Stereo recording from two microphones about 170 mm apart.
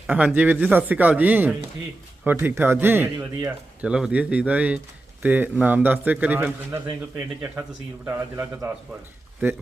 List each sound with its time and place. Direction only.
0.1 s speech: 10° right (ahead or behind)
8.0 s speech: 15° right (ahead or behind)